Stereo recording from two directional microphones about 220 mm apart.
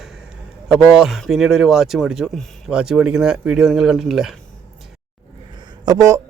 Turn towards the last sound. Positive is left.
turn(degrees=-15)  # may be behind; listen again after turning